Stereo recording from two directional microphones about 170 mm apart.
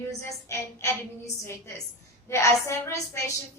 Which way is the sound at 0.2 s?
15° left (ahead or behind).